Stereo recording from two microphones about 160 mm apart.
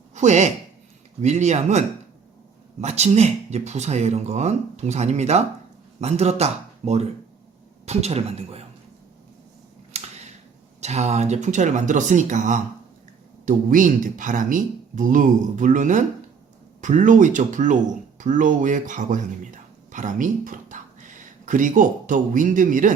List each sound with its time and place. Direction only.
0.1 s speech: 45° right (ahead or behind)
2.8 s speech: 45° right (ahead or behind)
9.9 s a sound: 45° right (ahead or behind)
10.8 s speech: 45° right (ahead or behind)